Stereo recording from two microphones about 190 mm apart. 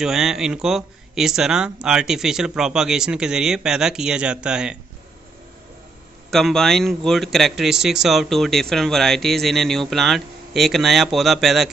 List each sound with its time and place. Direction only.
0.0 s speech: centre (ahead or behind)
6.3 s speech: centre (ahead or behind)